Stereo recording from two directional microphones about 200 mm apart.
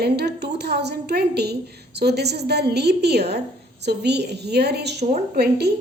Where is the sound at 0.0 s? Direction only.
55° right (ahead or behind).